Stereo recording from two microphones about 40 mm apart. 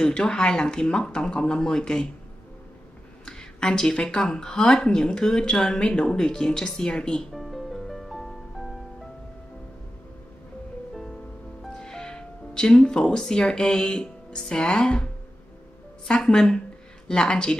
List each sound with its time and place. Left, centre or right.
0.0 s speech: centre
3.3 s speech: left
7.3 s music: centre
11.7 s speech: centre
16.1 s speech: centre